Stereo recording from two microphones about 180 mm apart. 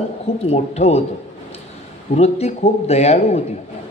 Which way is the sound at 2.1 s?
35° left (ahead or behind).